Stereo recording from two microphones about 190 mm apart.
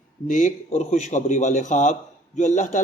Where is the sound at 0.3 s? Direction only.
40° left (ahead or behind).